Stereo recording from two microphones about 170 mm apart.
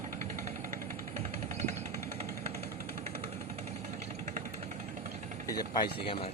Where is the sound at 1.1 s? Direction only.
40° right (ahead or behind).